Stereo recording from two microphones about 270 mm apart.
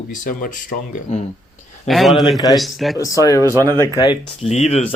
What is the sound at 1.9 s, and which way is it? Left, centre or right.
A man's voice, centre.